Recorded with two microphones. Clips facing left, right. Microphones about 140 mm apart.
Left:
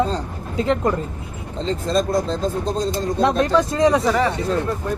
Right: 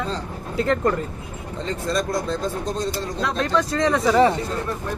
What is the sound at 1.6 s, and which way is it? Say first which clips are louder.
Speech: left 4 dB; 30° left (ahead or behind).